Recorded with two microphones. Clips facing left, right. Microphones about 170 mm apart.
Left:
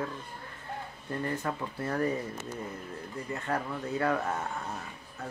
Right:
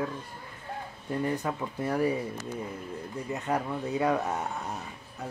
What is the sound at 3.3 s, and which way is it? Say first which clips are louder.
Speech: right 3 dB; 15° right (ahead or behind).